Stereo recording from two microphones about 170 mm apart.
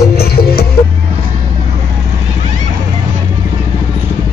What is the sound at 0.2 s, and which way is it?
Music, 65° left (ahead or behind).